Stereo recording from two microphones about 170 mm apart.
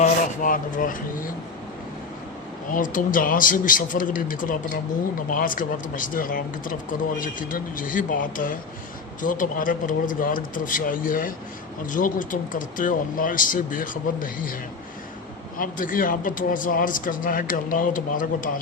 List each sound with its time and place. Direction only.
0.0 s speech: 50° left (ahead or behind)
2.6 s speech: 50° left (ahead or behind)
15.5 s speech: 55° left (ahead or behind)